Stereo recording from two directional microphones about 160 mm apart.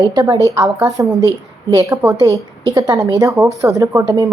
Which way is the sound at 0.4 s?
20° right (ahead or behind).